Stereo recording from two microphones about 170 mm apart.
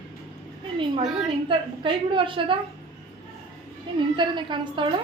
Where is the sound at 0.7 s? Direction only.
30° right (ahead or behind).